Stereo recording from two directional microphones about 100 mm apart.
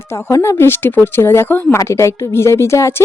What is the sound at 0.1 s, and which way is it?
A woman's voice, 25° left (ahead or behind).